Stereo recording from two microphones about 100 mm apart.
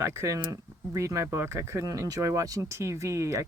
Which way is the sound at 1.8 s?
40° right (ahead or behind).